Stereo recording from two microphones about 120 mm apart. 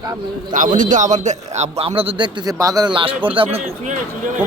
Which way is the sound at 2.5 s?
30° right (ahead or behind).